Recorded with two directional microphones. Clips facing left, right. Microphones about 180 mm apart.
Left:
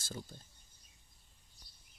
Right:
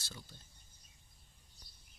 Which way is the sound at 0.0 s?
45° left (ahead or behind).